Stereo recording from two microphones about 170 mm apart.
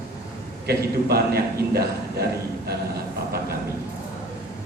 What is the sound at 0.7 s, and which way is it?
A man's voice, 65° right (ahead or behind).